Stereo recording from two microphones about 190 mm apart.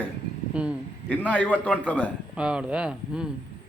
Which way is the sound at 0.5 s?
5° right (ahead or behind).